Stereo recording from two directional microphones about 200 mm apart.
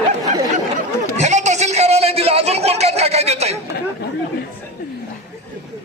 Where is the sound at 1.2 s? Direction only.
35° right (ahead or behind).